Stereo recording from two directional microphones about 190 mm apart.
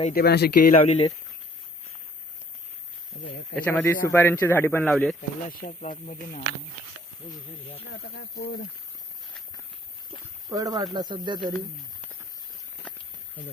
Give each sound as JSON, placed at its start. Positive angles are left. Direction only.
{"t": 0.1, "sound": "speech", "side_deg": 55}
{"t": 3.1, "sound": "speech", "side_deg": 65}
{"t": 3.5, "sound": "speech", "side_deg": 10}
{"t": 5.5, "sound": "speech", "side_deg": 45}
{"t": 7.9, "sound": "speech", "side_deg": 65}
{"t": 10.5, "sound": "speech", "side_deg": -20}